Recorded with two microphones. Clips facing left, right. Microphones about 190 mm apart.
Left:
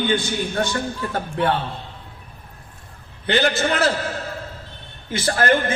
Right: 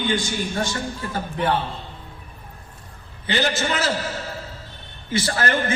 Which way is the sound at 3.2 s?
60° left (ahead or behind).